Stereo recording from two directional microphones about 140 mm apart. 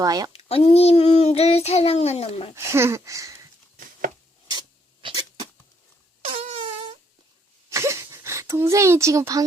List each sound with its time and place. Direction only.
0.0 s speech: 25° right (ahead or behind)
0.3 s a child's voice: 45° left (ahead or behind)
2.6 s speech: 20° right (ahead or behind)
5.0 s sneeze: 30° right (ahead or behind)
6.2 s a sound: 50° right (ahead or behind)
7.7 s a sound: 20° right (ahead or behind)